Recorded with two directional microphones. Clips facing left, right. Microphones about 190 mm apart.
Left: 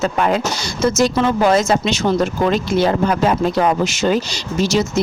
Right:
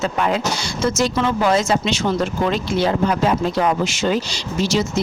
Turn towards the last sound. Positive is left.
turn(degrees=45)  # may be behind; listen again after turning